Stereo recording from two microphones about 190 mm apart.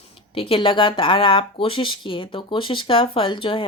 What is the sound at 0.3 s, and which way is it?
Speech, 30° left (ahead or behind).